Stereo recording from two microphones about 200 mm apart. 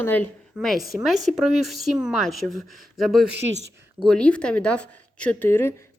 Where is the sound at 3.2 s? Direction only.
60° right (ahead or behind).